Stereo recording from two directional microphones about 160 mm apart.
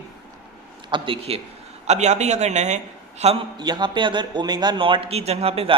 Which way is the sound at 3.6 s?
25° right (ahead or behind).